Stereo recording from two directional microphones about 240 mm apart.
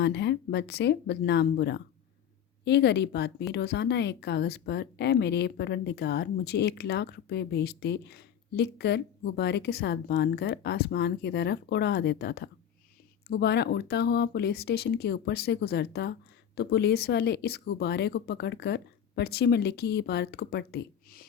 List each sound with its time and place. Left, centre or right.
0.0 s speech: left